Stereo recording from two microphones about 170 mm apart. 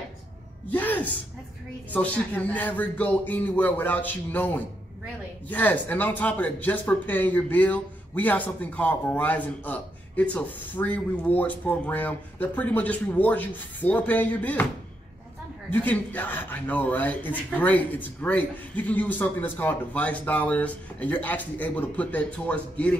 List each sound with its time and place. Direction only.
0.7 s a sound: 10° left (ahead or behind)
1.9 s speech: 10° left (ahead or behind)
15.7 s speech: 10° left (ahead or behind)